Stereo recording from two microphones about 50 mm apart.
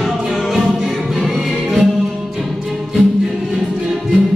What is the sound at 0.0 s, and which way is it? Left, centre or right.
Music, centre.